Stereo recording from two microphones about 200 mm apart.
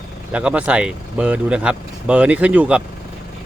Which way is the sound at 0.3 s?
5° right (ahead or behind).